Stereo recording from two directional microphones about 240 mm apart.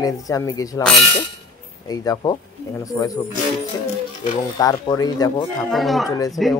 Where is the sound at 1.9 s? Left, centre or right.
Centre.